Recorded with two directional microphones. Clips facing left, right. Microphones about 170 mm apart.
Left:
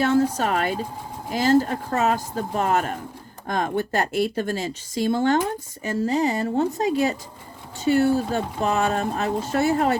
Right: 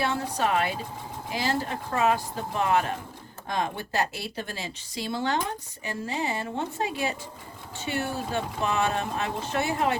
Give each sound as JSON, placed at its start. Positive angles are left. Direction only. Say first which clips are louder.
{"t": 0.0, "sound": "speech", "louder": "left 7 dB", "side_deg": 45}